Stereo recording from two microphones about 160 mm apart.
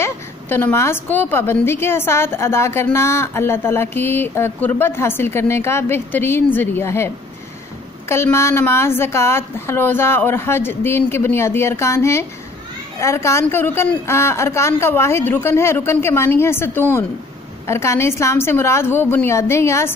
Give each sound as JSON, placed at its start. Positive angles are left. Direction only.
{"t": 0.0, "sound": "a woman's voice", "side_deg": 15}
{"t": 8.1, "sound": "a woman's voice", "side_deg": 15}